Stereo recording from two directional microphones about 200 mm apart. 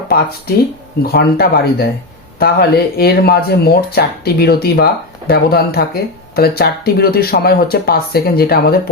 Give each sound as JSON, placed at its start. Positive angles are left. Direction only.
{"t": 0.5, "sound": "speech", "side_deg": 50}